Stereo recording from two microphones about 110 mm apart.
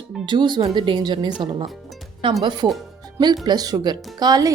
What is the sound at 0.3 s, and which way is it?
Speech, 45° right (ahead or behind).